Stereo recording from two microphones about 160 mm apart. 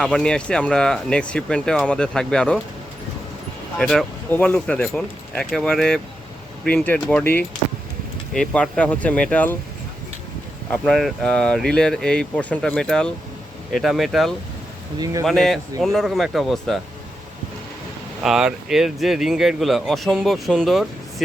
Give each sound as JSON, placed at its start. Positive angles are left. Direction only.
{"t": 0.0, "sound": "speech", "side_deg": 5}
{"t": 3.8, "sound": "speech", "side_deg": 0}
{"t": 10.7, "sound": "speech", "side_deg": 0}
{"t": 14.9, "sound": "speech", "side_deg": -25}
{"t": 15.2, "sound": "speech", "side_deg": 0}
{"t": 18.2, "sound": "speech", "side_deg": -5}